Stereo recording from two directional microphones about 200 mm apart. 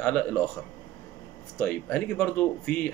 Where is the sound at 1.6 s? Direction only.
10° left (ahead or behind).